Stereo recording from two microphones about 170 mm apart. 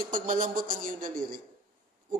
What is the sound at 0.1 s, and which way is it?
A man's voice, 50° right (ahead or behind).